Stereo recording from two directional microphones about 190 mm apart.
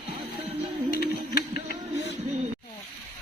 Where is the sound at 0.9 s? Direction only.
50° left (ahead or behind).